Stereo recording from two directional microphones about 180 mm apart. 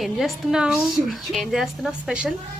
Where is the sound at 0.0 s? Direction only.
Centre (ahead or behind).